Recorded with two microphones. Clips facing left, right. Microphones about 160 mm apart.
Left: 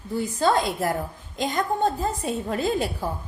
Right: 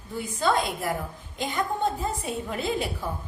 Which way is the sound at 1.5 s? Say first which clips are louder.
Left 3 dB; 40° left (ahead or behind).